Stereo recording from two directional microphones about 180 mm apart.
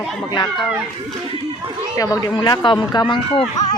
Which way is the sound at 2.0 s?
20° left (ahead or behind).